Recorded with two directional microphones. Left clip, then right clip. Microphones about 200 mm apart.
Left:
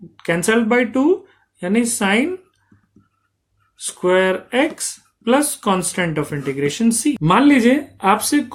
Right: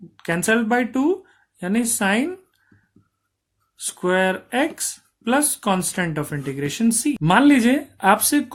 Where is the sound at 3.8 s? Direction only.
40° right (ahead or behind).